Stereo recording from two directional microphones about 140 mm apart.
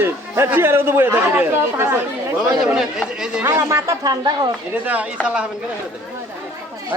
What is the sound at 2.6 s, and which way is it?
Speech, 5° right (ahead or behind).